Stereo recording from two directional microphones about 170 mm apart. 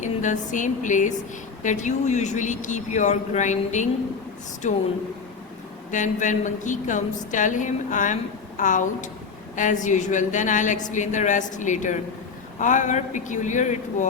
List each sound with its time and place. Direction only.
0.0 s a sound: 45° left (ahead or behind)
1.6 s a woman's voice: 45° left (ahead or behind)
5.9 s a woman's voice: 45° left (ahead or behind)